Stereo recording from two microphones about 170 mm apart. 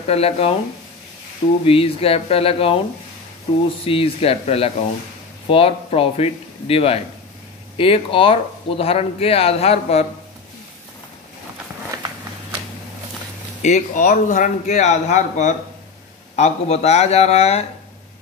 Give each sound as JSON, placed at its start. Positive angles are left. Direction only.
{"t": 0.0, "sound": "speech", "side_deg": 35}
{"t": 1.7, "sound": "speech", "side_deg": 35}
{"t": 3.8, "sound": "speech", "side_deg": 35}
{"t": 13.6, "sound": "speech", "side_deg": 45}